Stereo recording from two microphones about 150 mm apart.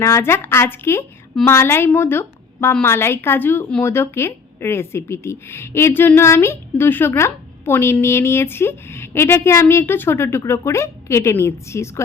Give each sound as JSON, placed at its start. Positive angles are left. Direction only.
{"t": 0.0, "sound": "a woman's voice", "side_deg": 15}